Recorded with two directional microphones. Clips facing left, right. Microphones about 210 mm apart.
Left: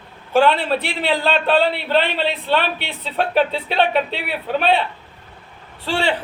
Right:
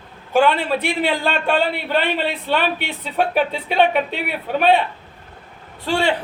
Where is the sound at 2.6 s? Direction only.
45° right (ahead or behind).